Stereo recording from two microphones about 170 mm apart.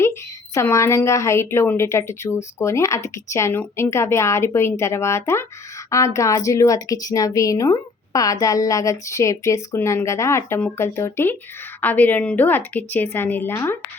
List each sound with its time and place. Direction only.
0.0 s a woman's voice: 15° left (ahead or behind)